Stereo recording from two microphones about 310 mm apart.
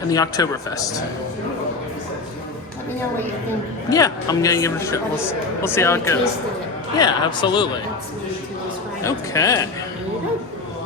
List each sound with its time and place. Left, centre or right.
0.1 s a man's voice: centre
3.8 s a man's voice: centre
9.0 s a man's voice: centre